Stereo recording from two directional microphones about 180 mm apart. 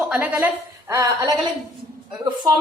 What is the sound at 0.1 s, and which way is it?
A woman's voice, 10° right (ahead or behind).